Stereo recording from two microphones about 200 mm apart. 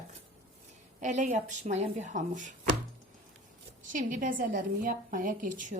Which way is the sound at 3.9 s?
40° right (ahead or behind).